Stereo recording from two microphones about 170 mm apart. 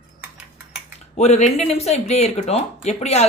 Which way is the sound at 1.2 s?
40° left (ahead or behind).